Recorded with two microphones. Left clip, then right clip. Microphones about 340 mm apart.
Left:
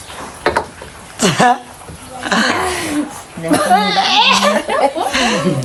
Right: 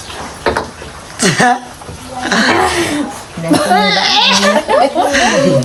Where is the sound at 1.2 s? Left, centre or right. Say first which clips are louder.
Right 1 dB; centre.